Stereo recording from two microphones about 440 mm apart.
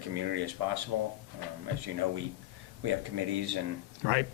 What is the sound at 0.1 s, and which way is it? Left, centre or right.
Speech, right.